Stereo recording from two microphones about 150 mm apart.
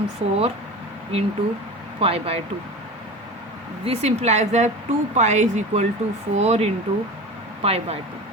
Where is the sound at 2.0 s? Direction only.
40° right (ahead or behind).